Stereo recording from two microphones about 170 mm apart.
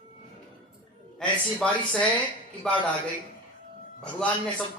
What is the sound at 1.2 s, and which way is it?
Speech, 5° left (ahead or behind).